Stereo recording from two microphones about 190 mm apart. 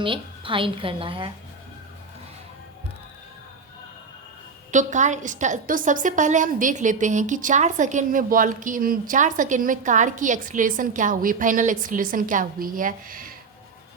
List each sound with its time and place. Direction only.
0.0 s a woman's voice: 25° right (ahead or behind)
4.7 s a woman's voice: 40° right (ahead or behind)